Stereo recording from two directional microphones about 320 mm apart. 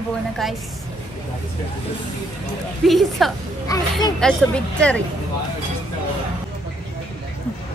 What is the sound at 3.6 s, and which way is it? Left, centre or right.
Speech, centre.